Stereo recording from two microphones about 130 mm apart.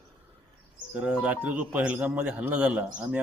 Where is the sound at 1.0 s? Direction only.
10° right (ahead or behind).